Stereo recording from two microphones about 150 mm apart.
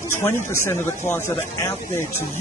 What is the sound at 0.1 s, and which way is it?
Speech, 15° left (ahead or behind).